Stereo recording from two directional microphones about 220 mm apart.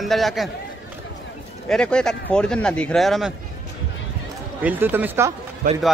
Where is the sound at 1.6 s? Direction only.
5° left (ahead or behind).